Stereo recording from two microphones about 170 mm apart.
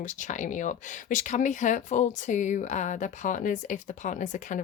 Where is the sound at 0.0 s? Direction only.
50° left (ahead or behind).